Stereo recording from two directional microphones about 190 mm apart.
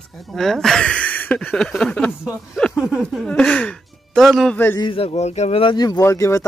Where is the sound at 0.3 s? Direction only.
Centre (ahead or behind).